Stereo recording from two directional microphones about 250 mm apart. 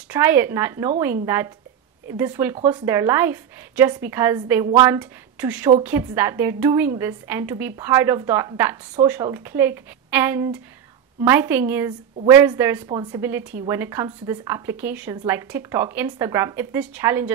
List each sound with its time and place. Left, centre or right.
0.1 s speech: centre